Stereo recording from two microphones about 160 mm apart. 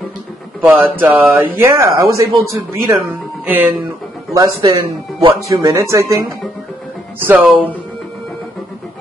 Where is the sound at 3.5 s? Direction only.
10° right (ahead or behind).